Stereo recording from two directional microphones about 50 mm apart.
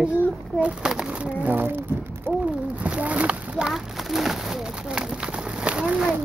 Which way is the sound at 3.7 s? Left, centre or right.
Centre.